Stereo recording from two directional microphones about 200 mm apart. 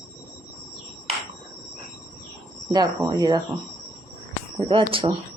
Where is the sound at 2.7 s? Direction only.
20° right (ahead or behind).